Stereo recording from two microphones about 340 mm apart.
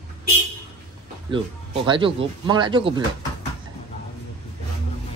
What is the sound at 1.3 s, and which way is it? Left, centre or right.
Speech, centre.